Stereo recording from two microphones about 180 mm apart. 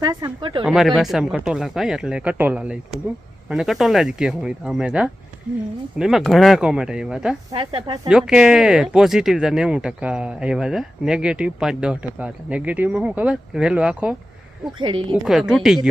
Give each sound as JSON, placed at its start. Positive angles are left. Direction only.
{"t": 0.0, "sound": "speech", "side_deg": -20}
{"t": 0.6, "sound": "speech", "side_deg": 0}
{"t": 7.5, "sound": "speech", "side_deg": -30}
{"t": 8.0, "sound": "speech", "side_deg": -5}
{"t": 14.8, "sound": "speech", "side_deg": -25}
{"t": 15.3, "sound": "speech", "side_deg": 0}